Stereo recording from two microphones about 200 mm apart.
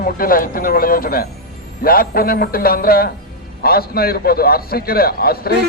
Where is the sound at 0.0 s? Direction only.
45° left (ahead or behind).